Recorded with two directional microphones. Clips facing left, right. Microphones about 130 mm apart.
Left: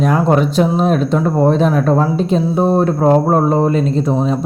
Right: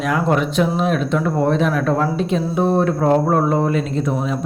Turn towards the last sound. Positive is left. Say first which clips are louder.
# left 5 dB
turn(degrees=30)  # may be behind; listen again after turning